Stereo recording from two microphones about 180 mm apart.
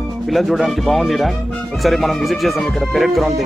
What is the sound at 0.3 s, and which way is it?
Speech, centre (ahead or behind).